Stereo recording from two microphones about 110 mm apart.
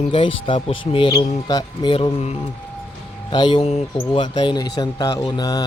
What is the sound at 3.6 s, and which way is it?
Speech, 65° left (ahead or behind).